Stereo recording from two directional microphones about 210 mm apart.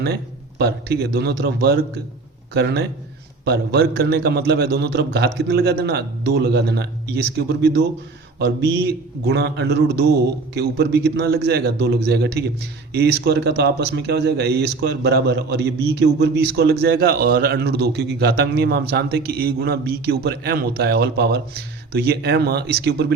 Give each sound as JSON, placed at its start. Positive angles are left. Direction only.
{"t": 0.6, "sound": "a man's voice", "side_deg": -50}